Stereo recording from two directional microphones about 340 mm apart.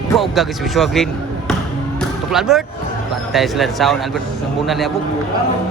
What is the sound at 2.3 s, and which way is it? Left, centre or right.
Speech, centre.